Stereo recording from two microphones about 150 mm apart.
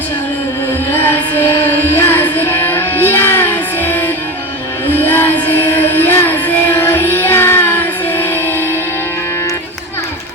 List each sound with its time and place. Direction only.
1.4 s music: 15° left (ahead or behind)